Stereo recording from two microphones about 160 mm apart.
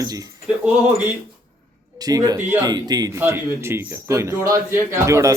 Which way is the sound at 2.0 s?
25° right (ahead or behind).